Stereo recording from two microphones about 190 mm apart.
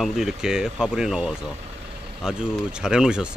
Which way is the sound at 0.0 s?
5° right (ahead or behind).